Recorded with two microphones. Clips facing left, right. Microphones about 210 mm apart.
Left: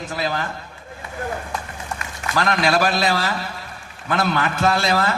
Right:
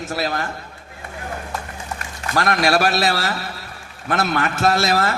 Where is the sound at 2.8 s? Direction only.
80° right.